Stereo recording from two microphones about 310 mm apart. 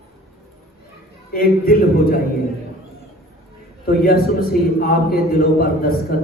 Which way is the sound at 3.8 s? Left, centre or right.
Left.